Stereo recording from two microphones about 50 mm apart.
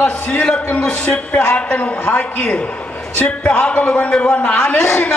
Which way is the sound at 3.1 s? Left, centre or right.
Left.